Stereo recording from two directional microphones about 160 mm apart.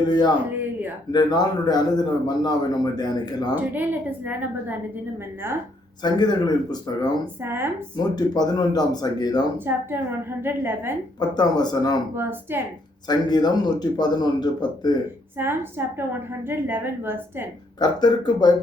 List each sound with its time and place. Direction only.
0.1 s speech: 25° left (ahead or behind)
3.5 s a woman's voice: 10° right (ahead or behind)
6.0 s speech: 25° left (ahead or behind)
7.4 s a woman's voice: 15° right (ahead or behind)
7.9 s speech: 25° left (ahead or behind)
9.6 s a woman's voice: 15° right (ahead or behind)
11.2 s speech: 25° left (ahead or behind)
12.1 s a woman's voice: 15° right (ahead or behind)
13.1 s speech: 25° left (ahead or behind)
15.4 s a woman's voice: 15° right (ahead or behind)
17.7 s speech: 25° left (ahead or behind)